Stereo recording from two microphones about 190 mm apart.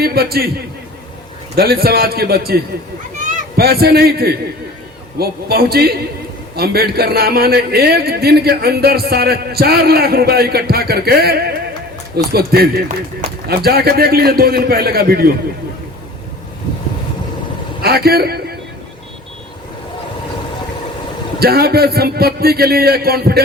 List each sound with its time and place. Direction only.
0.0 s a man's voice: 55° right (ahead or behind)
1.5 s a man's voice: 55° right (ahead or behind)
17.8 s a man's voice: 55° right (ahead or behind)
21.3 s a man's voice: 55° right (ahead or behind)